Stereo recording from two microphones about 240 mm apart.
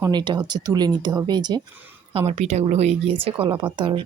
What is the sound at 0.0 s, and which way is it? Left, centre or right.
Speech, centre.